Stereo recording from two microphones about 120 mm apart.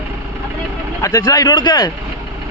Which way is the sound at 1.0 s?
30° left (ahead or behind).